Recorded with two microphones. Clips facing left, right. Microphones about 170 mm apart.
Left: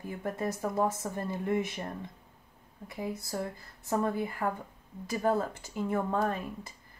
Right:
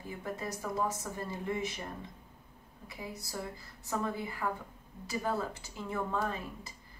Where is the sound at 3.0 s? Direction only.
50° left (ahead or behind).